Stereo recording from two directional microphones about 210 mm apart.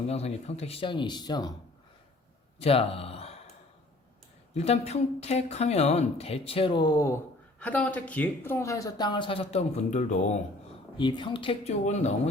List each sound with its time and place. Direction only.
0.1 s speech: 30° left (ahead or behind)
2.6 s speech: 30° left (ahead or behind)
4.5 s speech: 30° left (ahead or behind)
10.9 s speech: 20° left (ahead or behind)